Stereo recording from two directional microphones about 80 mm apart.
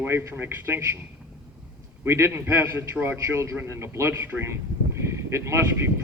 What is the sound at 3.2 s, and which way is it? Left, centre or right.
A man's voice, right.